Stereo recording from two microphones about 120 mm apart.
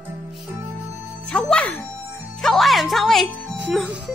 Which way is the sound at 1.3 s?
10° left (ahead or behind).